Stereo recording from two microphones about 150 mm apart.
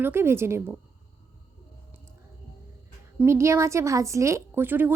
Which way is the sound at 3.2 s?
20° right (ahead or behind).